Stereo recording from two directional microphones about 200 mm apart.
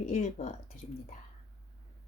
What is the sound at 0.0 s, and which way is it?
Speech, 35° left (ahead or behind).